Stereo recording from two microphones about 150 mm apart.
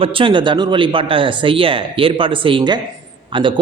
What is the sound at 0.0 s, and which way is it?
A man's voice, 35° right (ahead or behind).